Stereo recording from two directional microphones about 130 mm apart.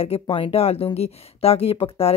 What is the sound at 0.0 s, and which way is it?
Speech, 45° left (ahead or behind).